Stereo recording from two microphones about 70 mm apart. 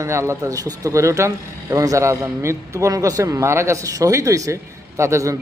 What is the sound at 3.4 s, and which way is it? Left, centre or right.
A man's voice, right.